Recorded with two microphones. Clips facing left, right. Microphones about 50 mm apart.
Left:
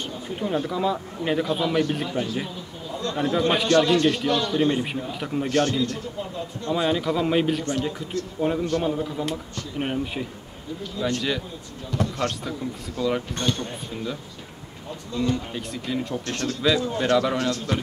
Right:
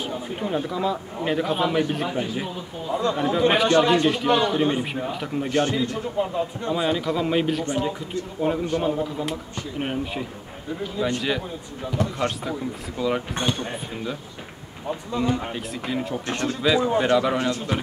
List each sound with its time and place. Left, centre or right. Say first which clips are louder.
0.4 s a man's voice: left 1 dB; centre
5.1 s a man's voice: even; centre
5.5 s a man's voice: even; centre
6.7 s a man's voice: left 2 dB; centre
7.8 s speech: right 1 dB; centre
8.4 s a man's voice: even; centre
10.8 s speech: right 1 dB; centre
15.1 s a man's voice: right 1 dB; centre
15.5 s a man's voice: right 1 dB; centre
16.3 s speech: right 1 dB; centre